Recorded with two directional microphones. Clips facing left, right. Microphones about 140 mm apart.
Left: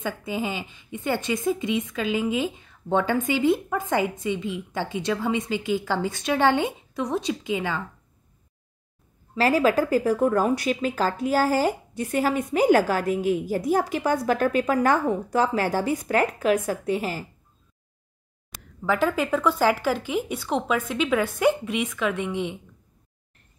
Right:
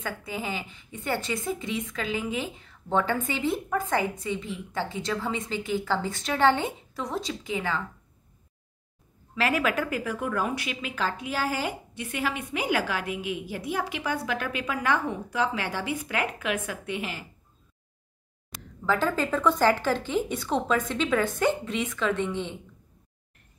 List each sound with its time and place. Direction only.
0.0 s a woman's voice: 20° left (ahead or behind)
9.3 s speech: 35° left (ahead or behind)
18.5 s a sound: centre (ahead or behind)
18.9 s speech: 10° left (ahead or behind)